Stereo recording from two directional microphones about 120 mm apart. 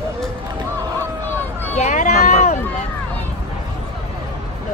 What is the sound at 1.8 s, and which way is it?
Run, 75° left (ahead or behind).